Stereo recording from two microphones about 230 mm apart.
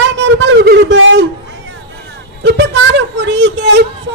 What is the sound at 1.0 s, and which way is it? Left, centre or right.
Speech, right.